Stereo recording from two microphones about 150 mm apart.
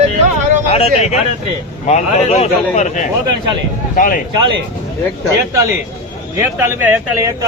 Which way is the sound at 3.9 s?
65° left (ahead or behind).